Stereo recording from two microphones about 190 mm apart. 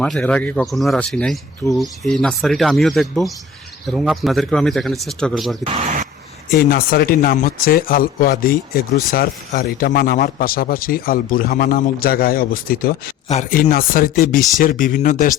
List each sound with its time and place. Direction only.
0.0 s speech: 5° left (ahead or behind)
5.7 s a sound: 40° right (ahead or behind)
6.5 s speech: 50° left (ahead or behind)
13.2 s speech: 40° left (ahead or behind)